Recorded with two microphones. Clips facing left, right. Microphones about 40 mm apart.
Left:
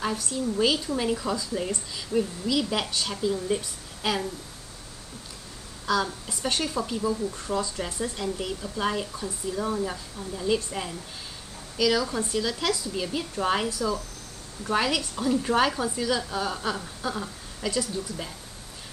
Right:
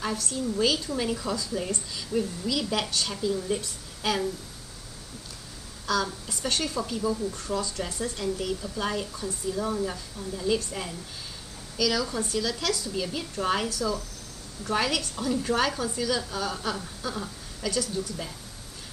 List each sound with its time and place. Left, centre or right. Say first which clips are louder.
0.2 s speech: even; centre
5.9 s speech: left 2 dB; centre
7.3 s speech: left 1 dB; centre
14.6 s speech: left 2 dB; centre